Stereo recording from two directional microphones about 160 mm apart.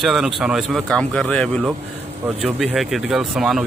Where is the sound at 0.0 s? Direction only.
Centre (ahead or behind).